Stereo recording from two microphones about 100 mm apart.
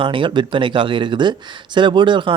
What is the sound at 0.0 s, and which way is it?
Speech, 55° right (ahead or behind).